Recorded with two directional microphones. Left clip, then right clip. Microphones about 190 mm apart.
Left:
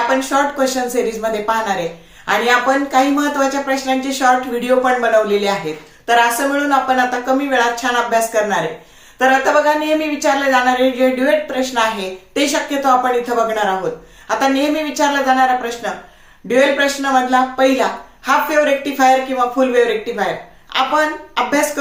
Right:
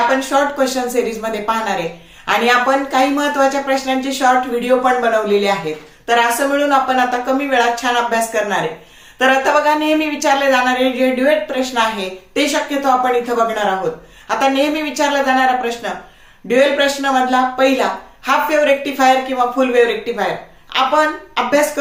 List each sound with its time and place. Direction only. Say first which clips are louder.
0.1 s a woman's voice: even; centre (ahead or behind)